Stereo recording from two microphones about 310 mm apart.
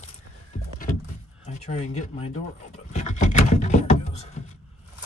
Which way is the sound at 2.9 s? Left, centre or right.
Left.